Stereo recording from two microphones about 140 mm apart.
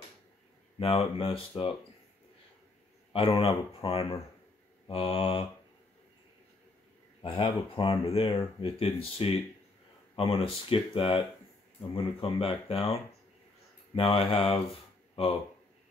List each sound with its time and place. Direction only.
0.7 s speech: 45° left (ahead or behind)
3.1 s speech: 40° left (ahead or behind)
7.2 s speech: 35° left (ahead or behind)